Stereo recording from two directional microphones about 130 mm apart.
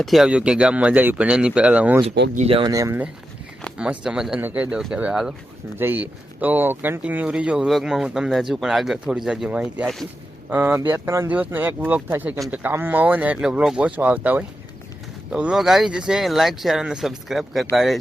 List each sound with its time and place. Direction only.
0.0 s speech: centre (ahead or behind)
2.0 s speech: 55° right (ahead or behind)
2.6 s speech: 30° right (ahead or behind)
3.8 s speech: 5° right (ahead or behind)
9.8 s speech: 5° left (ahead or behind)
10.5 s speech: 15° right (ahead or behind); by 18.0 s centre (ahead or behind)